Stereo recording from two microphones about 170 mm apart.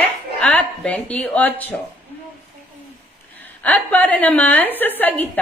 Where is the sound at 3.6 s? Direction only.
10° left (ahead or behind).